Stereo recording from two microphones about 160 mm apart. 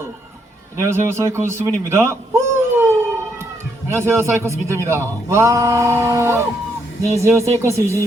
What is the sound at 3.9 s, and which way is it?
A man's voice, 15° right (ahead or behind).